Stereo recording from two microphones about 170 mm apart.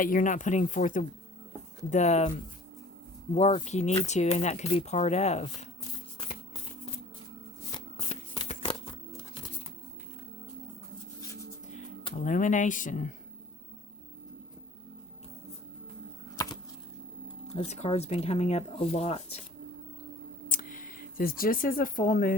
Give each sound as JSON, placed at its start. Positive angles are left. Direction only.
{"t": 0.0, "sound": "speech", "side_deg": 50}
{"t": 3.3, "sound": "speech", "side_deg": 40}
{"t": 8.1, "sound": "a sound", "side_deg": 35}
{"t": 12.2, "sound": "speech", "side_deg": 50}
{"t": 17.5, "sound": "speech", "side_deg": 40}
{"t": 20.5, "sound": "speech", "side_deg": 50}